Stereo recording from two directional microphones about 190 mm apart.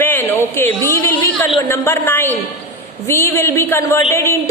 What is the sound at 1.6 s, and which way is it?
A woman's voice, 15° left (ahead or behind).